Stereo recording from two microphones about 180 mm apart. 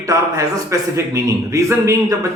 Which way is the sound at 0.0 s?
20° right (ahead or behind).